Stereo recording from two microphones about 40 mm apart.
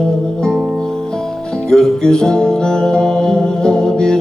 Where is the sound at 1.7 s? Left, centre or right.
Centre.